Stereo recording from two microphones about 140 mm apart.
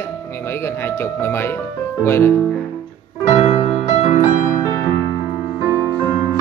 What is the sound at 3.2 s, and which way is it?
Music, 50° left (ahead or behind).